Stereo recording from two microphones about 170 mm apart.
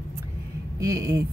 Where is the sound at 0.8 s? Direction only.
20° right (ahead or behind).